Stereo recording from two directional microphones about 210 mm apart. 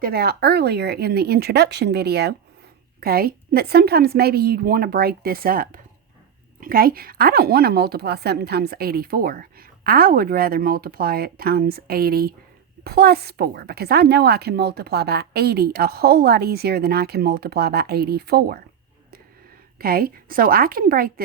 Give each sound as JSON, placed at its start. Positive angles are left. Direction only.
{"t": 0.0, "sound": "a woman's voice", "side_deg": -50}
{"t": 19.8, "sound": "a woman's voice", "side_deg": -45}